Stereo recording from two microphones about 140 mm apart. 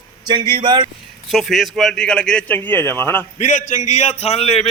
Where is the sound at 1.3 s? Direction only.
Centre (ahead or behind); by 3.2 s 15° left (ahead or behind).